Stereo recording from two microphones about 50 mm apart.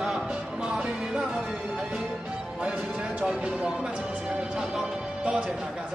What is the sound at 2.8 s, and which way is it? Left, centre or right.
Music, centre.